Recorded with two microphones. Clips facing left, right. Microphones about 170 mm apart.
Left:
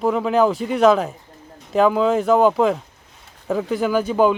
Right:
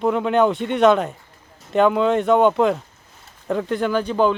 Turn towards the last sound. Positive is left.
turn(degrees=5)  # may be behind; listen again after turning